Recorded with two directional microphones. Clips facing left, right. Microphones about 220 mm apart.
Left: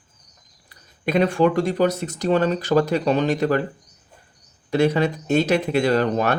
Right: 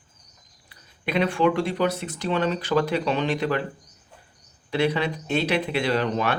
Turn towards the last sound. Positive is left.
turn(degrees=45)  # may be behind; listen again after turning